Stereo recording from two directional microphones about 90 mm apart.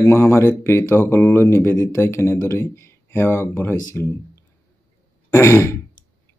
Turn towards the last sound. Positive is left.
turn(degrees=30)  # may be behind; listen again after turning